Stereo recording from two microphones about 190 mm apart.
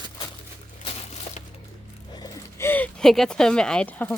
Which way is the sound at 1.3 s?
35° left (ahead or behind).